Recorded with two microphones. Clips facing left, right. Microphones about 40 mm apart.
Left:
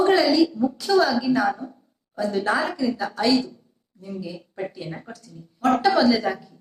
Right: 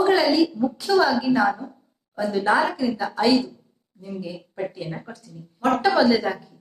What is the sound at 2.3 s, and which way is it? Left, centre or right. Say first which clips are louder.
A woman's voice: right 3 dB; centre.